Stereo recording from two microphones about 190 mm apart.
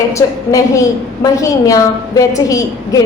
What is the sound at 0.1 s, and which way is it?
A woman's voice, 15° left (ahead or behind).